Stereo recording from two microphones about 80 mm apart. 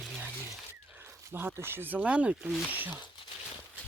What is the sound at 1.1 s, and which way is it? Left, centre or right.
Speech, right.